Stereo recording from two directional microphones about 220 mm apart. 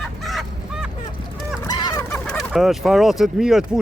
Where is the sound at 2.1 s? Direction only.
5° left (ahead or behind).